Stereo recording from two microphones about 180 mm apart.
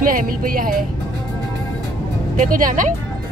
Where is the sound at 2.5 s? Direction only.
45° right (ahead or behind).